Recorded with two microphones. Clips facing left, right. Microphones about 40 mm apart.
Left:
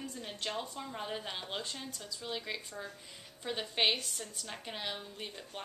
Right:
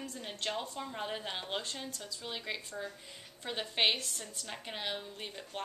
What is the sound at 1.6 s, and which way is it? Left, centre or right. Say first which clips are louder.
A woman's voice: right 1 dB; centre.